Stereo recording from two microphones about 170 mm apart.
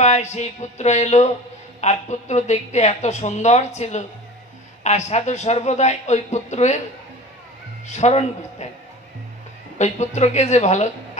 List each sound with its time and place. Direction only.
0.0 s a woman's voice: 45° left (ahead or behind)
7.9 s speech: 40° left (ahead or behind)
9.8 s a woman's voice: 40° left (ahead or behind)